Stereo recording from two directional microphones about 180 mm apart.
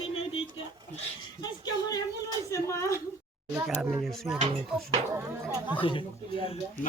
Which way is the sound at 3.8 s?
Centre (ahead or behind).